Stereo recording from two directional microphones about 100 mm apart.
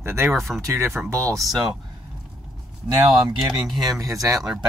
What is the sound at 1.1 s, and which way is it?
Speech, 35° right (ahead or behind).